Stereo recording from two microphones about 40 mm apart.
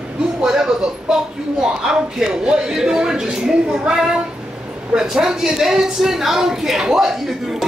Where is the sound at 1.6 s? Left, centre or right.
Centre.